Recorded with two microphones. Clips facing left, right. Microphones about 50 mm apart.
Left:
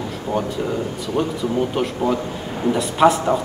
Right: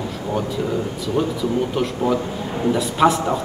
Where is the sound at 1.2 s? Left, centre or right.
Centre.